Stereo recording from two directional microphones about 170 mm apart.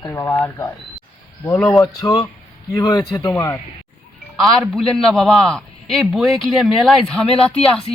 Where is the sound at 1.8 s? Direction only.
20° left (ahead or behind).